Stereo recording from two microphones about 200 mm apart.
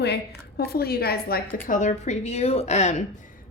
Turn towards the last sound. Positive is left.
turn(degrees=35)  # may be behind; listen again after turning